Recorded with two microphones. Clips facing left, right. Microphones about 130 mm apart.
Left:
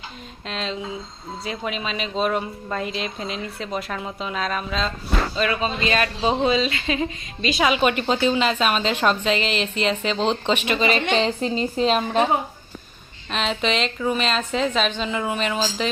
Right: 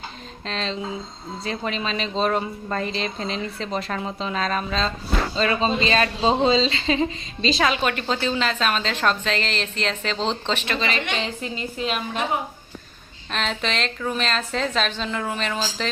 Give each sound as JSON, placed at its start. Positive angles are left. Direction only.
{"t": 0.4, "sound": "a woman's voice", "side_deg": 5}
{"t": 5.4, "sound": "speech", "side_deg": -30}
{"t": 7.5, "sound": "a woman's voice", "side_deg": 10}
{"t": 10.9, "sound": "a woman's voice", "side_deg": 30}
{"t": 13.3, "sound": "a woman's voice", "side_deg": 5}